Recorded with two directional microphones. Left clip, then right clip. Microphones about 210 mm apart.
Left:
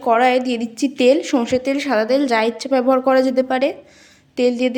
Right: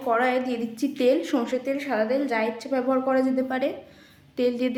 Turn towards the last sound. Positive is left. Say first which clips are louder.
# left 7 dB
turn(degrees=30)  # may be behind; listen again after turning